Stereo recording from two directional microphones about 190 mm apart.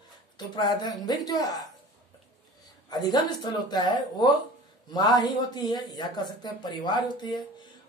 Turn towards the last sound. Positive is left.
turn(degrees=25)  # may be behind; listen again after turning